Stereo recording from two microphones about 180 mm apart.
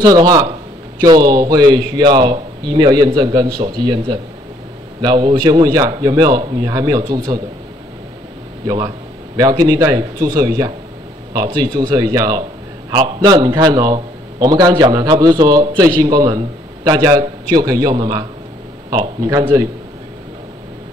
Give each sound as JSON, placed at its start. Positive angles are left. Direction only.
{"t": 0.0, "sound": "a man's voice", "side_deg": -20}
{"t": 8.6, "sound": "a man's voice", "side_deg": -20}